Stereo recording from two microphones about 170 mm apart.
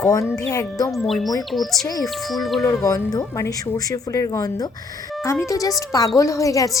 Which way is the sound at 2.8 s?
20° left (ahead or behind).